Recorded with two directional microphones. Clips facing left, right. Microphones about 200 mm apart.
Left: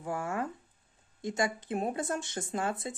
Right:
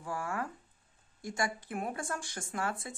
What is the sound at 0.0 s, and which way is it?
Speech, 20° left (ahead or behind).